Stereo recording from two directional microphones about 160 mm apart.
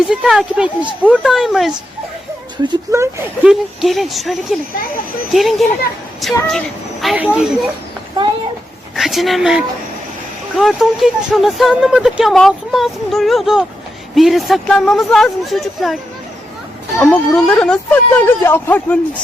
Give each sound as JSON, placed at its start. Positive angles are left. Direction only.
{"t": 0.0, "sound": "speech", "side_deg": 0}
{"t": 2.6, "sound": "speech", "side_deg": -20}
{"t": 3.4, "sound": "speech", "side_deg": 0}
{"t": 9.0, "sound": "speech", "side_deg": 0}
{"t": 17.0, "sound": "speech", "side_deg": 5}